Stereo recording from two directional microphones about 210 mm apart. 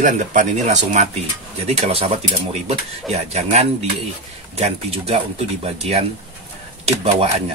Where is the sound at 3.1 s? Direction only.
30° right (ahead or behind).